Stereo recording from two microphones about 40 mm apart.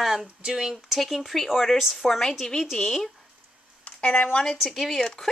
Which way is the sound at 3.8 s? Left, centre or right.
Left.